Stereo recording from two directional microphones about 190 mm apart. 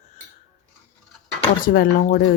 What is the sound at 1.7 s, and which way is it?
Speech, 55° left (ahead or behind).